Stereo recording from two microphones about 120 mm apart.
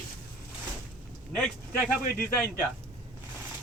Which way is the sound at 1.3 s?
5° left (ahead or behind).